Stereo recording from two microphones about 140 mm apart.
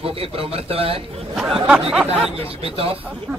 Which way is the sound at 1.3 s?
5° right (ahead or behind).